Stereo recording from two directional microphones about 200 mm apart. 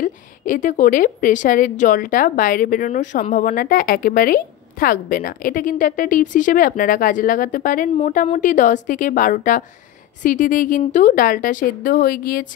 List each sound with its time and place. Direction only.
0.0 s a woman's voice: 40° left (ahead or behind)